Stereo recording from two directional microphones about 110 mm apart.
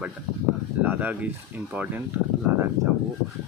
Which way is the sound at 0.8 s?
15° right (ahead or behind).